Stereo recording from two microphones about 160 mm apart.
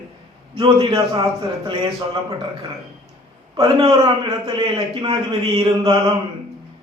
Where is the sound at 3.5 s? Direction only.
35° right (ahead or behind).